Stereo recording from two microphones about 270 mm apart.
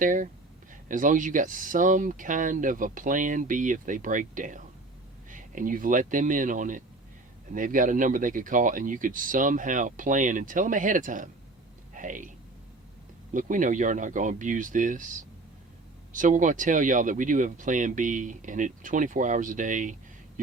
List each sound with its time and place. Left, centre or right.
0.0 s speech: right
13.3 s speech: right